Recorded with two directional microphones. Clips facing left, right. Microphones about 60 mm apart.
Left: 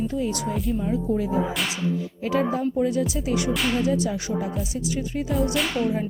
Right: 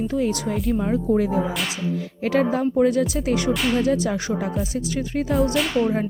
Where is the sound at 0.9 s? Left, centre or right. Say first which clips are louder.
Right 4 dB; right.